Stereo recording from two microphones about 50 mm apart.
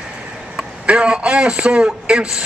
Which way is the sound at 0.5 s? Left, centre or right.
Right.